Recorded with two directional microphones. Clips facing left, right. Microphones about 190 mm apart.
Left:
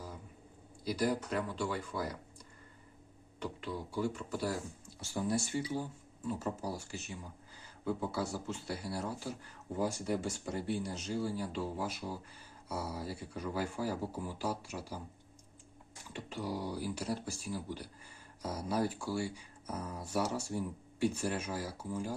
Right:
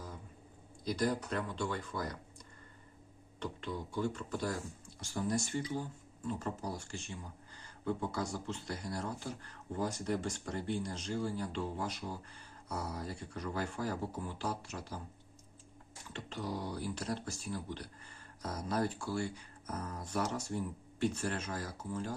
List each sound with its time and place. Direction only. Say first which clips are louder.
0.9 s speech: left 1 dB; 10° left (ahead or behind)
3.4 s speech: even; 10° left (ahead or behind)
16.1 s speech: left 1 dB; 10° left (ahead or behind)